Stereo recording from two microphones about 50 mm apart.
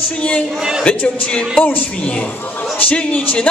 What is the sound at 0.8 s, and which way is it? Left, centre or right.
Speech, left.